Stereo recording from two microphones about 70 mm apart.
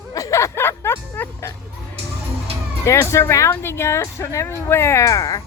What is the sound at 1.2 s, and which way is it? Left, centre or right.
Music, left.